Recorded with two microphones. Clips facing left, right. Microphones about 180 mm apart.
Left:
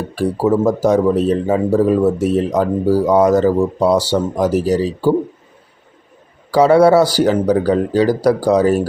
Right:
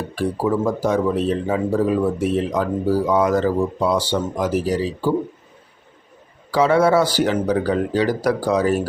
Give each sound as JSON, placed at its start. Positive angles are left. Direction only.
{"t": 0.2, "sound": "speech", "side_deg": 40}
{"t": 6.5, "sound": "speech", "side_deg": 40}